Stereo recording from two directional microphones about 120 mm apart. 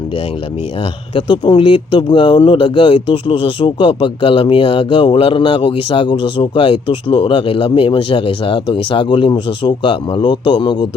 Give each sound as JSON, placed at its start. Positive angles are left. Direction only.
{"t": 1.1, "sound": "speech", "side_deg": 45}